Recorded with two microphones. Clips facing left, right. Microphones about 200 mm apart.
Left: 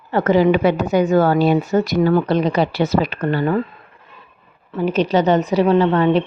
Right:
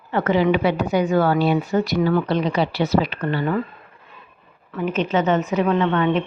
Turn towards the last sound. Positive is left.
turn(degrees=35)  # may be behind; listen again after turning